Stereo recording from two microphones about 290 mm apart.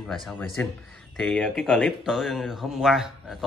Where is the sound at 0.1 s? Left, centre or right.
Centre.